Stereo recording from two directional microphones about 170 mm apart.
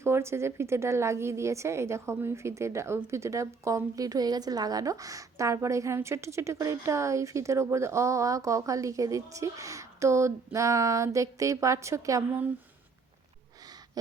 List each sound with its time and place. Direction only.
0.0 s a woman's voice: 15° right (ahead or behind)